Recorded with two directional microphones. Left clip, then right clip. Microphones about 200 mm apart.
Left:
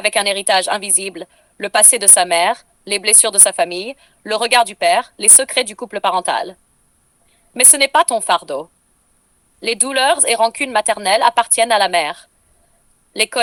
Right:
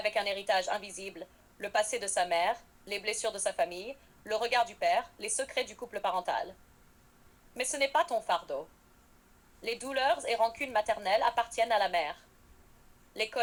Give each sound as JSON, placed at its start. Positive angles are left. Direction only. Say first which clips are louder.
{"t": 0.0, "sound": "a woman's voice", "louder": "left 15 dB", "side_deg": 45}